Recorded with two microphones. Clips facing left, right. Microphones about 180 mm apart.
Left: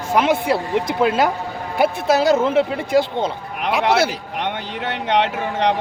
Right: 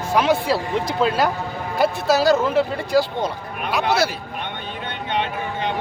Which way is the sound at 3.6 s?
90° left.